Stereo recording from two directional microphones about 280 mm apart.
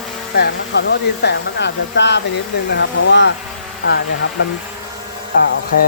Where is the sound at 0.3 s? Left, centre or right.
Left.